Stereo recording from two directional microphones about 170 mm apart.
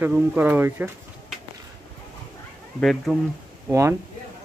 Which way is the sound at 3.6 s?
15° right (ahead or behind).